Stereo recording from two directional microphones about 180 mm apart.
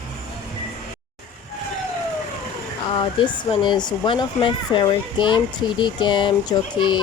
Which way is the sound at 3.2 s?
25° left (ahead or behind).